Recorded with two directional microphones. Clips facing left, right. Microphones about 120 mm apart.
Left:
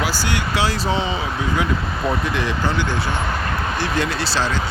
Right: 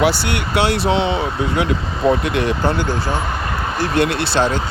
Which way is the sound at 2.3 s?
60° right (ahead or behind).